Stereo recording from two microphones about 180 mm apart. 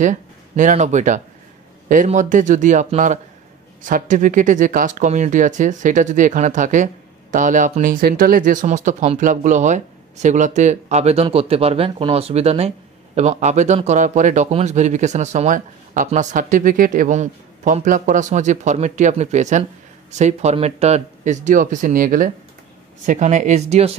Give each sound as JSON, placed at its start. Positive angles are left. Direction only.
{"t": 0.0, "sound": "speech", "side_deg": -45}